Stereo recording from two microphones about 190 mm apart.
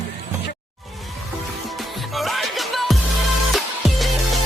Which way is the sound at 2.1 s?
Centre (ahead or behind).